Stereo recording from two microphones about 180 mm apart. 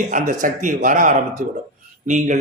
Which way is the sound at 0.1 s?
45° right (ahead or behind).